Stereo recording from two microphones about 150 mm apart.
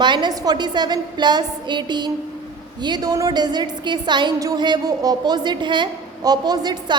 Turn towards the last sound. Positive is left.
turn(degrees=-25)  # may be behind; listen again after turning